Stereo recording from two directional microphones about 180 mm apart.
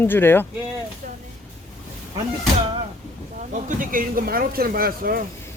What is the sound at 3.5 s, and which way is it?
Speech, 45° right (ahead or behind).